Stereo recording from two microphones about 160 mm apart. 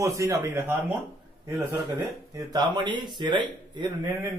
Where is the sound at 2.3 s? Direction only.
25° right (ahead or behind).